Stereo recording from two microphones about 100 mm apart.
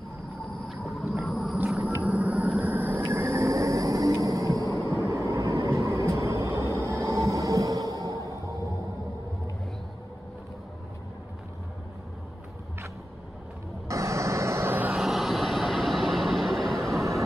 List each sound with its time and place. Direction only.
0.7 s a sound: centre (ahead or behind)
2.0 s vehicle: 15° right (ahead or behind); by 6.6 s 30° right (ahead or behind)
6.9 s music: 30° right (ahead or behind)
13.8 s vehicle: 30° right (ahead or behind)
15.0 s vehicle: centre (ahead or behind)